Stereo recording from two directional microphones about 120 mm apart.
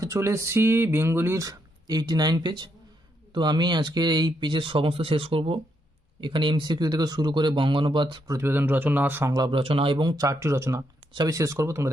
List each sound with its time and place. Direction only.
0.0 s speech: 25° right (ahead or behind); by 8.2 s 40° right (ahead or behind)
8.3 s speech: 20° right (ahead or behind)
9.3 s speech: 40° right (ahead or behind); by 11.9 s 25° right (ahead or behind)